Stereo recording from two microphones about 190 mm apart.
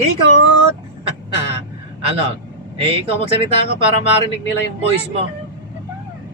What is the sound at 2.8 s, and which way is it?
Speech, 30° right (ahead or behind).